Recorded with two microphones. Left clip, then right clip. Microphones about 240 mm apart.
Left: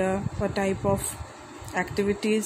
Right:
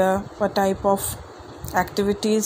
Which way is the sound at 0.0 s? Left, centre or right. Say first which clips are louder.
Right 7 dB; centre.